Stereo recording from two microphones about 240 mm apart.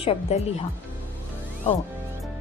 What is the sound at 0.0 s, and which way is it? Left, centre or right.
Speech, left.